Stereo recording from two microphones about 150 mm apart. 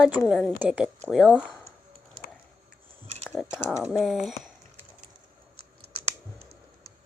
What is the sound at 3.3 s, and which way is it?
Speech, centre (ahead or behind).